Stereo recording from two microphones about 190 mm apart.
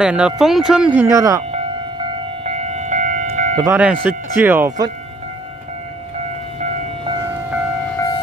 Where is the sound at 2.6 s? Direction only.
35° right (ahead or behind).